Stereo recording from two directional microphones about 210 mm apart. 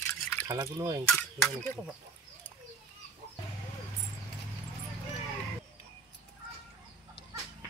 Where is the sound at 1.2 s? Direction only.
5° left (ahead or behind).